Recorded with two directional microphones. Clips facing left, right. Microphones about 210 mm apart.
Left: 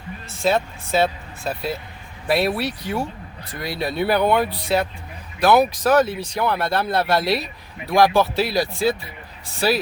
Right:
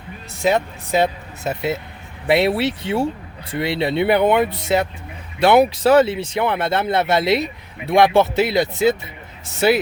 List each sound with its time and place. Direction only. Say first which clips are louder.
0.4 s speech: right 2 dB; 15° right (ahead or behind)